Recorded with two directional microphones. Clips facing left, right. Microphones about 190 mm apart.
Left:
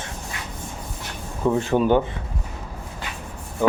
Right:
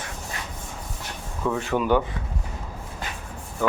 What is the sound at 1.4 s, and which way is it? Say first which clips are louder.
Speech: left 5 dB; 25° left (ahead or behind).